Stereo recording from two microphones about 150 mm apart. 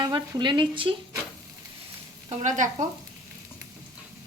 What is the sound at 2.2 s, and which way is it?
Stir, 55° right (ahead or behind).